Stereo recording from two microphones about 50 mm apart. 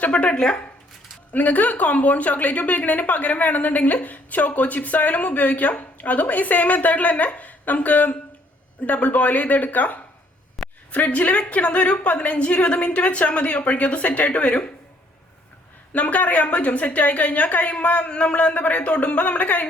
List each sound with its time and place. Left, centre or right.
0.0 s speech: left
1.3 s a woman's voice: left
10.6 s a sound: centre
10.9 s a woman's voice: left
15.9 s a woman's voice: left